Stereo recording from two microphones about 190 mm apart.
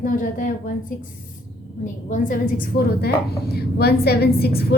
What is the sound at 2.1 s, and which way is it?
A woman's voice, 45° left (ahead or behind).